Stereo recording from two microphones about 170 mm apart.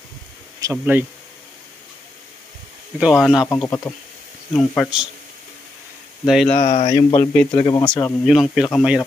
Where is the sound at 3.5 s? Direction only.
15° left (ahead or behind).